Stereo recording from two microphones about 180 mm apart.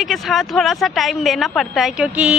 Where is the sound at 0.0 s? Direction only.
Centre (ahead or behind).